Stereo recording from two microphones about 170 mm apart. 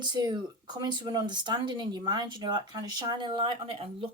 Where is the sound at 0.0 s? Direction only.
25° right (ahead or behind).